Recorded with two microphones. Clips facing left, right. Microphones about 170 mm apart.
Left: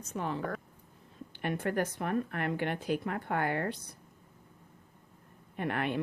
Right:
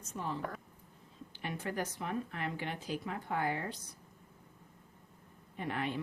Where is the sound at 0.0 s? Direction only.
65° left (ahead or behind).